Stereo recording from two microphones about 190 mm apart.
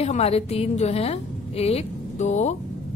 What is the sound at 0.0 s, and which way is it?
A woman's voice, 35° left (ahead or behind).